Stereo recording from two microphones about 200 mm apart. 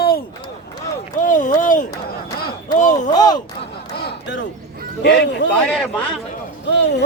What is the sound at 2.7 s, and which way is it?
Speech, 40° left (ahead or behind).